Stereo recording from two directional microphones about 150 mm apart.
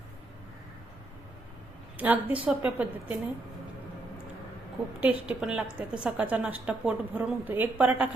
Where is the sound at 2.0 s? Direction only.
10° right (ahead or behind).